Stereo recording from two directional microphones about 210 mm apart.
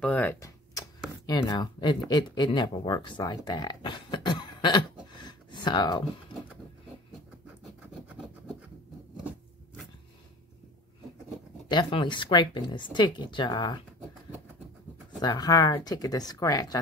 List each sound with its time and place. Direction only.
0.0 s tick-tock: 10° left (ahead or behind)
1.2 s speech: 20° left (ahead or behind)
5.1 s a sound: 20° left (ahead or behind)
7.9 s scratch: 5° right (ahead or behind)
11.7 s speech: 25° left (ahead or behind)
15.1 s speech: 20° left (ahead or behind)